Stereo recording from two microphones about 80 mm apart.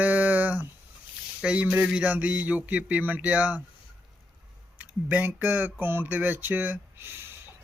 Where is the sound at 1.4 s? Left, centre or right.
Centre.